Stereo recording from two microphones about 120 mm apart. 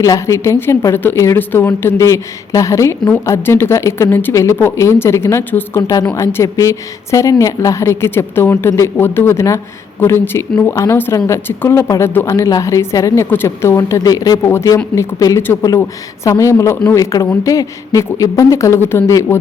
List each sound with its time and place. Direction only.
0.0 s a woman's voice: 25° left (ahead or behind)